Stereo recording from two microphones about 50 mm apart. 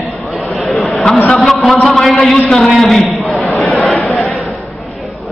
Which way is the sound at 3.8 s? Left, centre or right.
Left.